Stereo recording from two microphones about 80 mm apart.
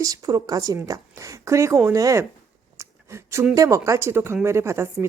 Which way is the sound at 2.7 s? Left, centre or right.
Right.